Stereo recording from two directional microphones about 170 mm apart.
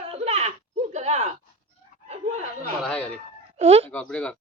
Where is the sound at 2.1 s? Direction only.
40° right (ahead or behind).